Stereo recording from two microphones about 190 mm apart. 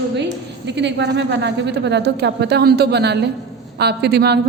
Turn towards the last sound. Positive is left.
turn(degrees=-60)  # may be behind; listen again after turning